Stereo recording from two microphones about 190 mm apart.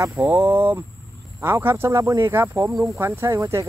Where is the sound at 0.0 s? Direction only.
10° right (ahead or behind).